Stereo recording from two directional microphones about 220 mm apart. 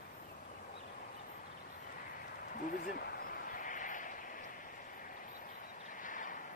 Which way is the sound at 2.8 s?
40° left (ahead or behind).